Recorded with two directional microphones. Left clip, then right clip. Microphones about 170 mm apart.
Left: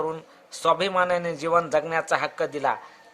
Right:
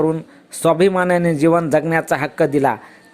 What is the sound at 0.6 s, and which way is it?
Speech, 30° right (ahead or behind).